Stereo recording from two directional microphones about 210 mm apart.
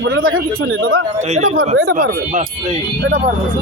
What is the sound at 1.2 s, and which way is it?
Speech, 30° right (ahead or behind).